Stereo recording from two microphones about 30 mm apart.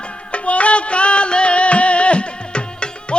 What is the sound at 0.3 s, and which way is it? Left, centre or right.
Music, left.